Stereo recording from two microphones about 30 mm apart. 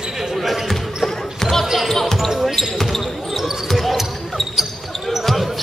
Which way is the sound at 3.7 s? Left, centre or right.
Centre.